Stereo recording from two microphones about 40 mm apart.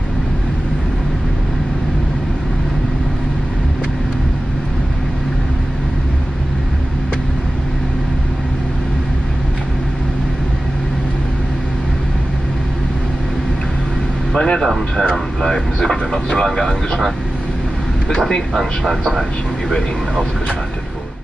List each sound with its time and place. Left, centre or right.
14.3 s a sound: centre
15.0 s vehicle: centre
18.5 s speech: centre